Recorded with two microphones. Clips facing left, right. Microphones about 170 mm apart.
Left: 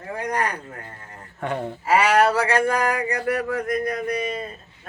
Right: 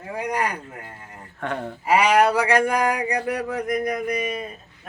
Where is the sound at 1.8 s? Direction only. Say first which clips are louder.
Right 1 dB; 15° right (ahead or behind).